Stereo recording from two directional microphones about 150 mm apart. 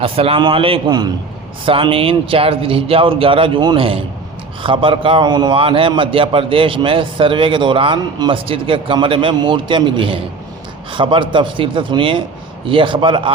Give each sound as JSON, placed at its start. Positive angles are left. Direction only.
{"t": 0.0, "sound": "a man's voice", "side_deg": -40}